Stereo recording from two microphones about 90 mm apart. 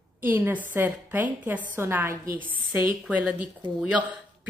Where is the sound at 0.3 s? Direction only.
20° right (ahead or behind).